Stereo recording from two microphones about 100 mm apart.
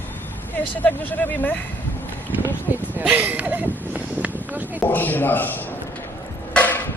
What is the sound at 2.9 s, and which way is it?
Speech, 15° right (ahead or behind).